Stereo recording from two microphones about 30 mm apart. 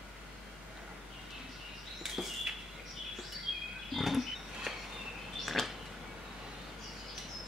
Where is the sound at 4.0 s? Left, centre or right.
Centre.